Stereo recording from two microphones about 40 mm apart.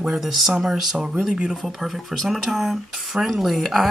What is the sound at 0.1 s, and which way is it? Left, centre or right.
Speech, centre.